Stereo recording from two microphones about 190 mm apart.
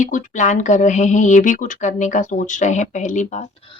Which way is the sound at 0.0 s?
40° left (ahead or behind).